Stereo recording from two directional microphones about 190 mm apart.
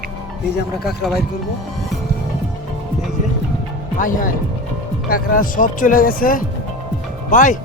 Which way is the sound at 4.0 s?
45° left (ahead or behind).